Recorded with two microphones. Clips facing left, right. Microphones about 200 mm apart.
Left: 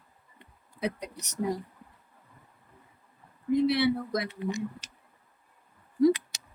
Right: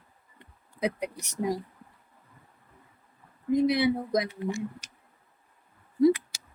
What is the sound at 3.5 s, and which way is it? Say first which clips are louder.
Speech: right 1 dB; 15° right (ahead or behind).